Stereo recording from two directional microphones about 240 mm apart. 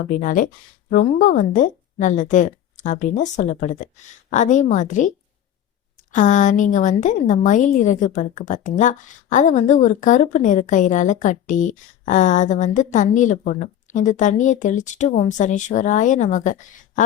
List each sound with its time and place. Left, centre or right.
0.2 s a woman's voice: left